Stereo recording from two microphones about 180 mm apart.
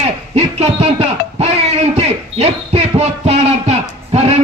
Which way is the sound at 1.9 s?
35° right (ahead or behind).